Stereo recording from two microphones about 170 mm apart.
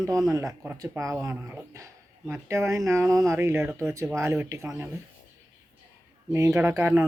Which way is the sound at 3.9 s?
15° right (ahead or behind).